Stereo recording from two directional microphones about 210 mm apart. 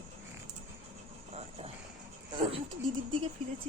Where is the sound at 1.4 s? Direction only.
30° right (ahead or behind).